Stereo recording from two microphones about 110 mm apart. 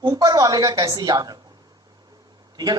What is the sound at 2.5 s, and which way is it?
Speech, 40° right (ahead or behind).